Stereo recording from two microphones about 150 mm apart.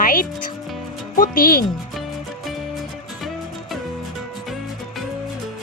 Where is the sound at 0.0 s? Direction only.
65° left (ahead or behind).